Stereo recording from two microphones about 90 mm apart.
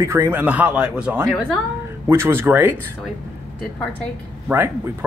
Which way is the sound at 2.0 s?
30° right (ahead or behind).